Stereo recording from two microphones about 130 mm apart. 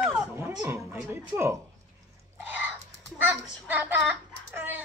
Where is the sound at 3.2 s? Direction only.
15° right (ahead or behind).